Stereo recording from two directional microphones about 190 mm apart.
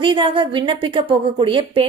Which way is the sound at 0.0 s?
25° right (ahead or behind).